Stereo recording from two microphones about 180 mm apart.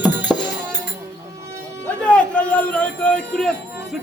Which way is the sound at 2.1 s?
5° left (ahead or behind).